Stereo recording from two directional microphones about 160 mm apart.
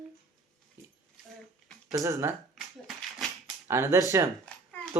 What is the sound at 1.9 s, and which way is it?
Speech, 20° right (ahead or behind).